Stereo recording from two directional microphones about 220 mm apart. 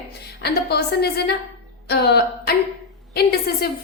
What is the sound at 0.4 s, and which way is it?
A woman's voice, 45° left (ahead or behind).